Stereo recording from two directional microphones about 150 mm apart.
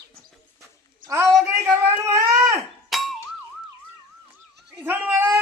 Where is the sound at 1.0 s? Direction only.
20° right (ahead or behind).